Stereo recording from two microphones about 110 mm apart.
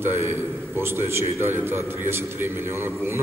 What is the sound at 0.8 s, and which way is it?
A man's voice, 25° right (ahead or behind).